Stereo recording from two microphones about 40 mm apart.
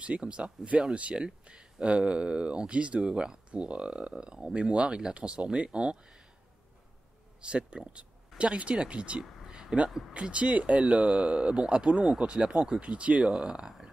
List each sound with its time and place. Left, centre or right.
0.0 s speech: right
7.4 s speech: right
9.2 s a sound: centre
10.1 s speech: right
12.8 s speech: right
13.2 s speech: centre